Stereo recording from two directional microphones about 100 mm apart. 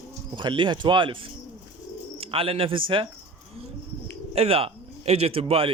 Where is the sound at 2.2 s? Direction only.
70° right (ahead or behind).